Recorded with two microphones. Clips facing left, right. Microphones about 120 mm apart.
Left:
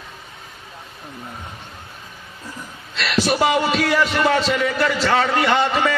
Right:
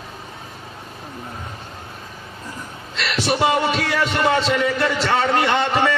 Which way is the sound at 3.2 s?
25° right (ahead or behind).